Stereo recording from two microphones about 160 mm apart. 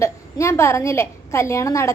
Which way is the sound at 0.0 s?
15° left (ahead or behind).